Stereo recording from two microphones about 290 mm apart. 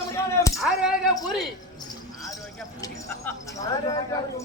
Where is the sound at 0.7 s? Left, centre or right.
Centre.